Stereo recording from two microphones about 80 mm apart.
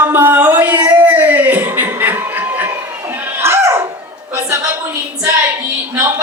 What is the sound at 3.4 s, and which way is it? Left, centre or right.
Dog, right.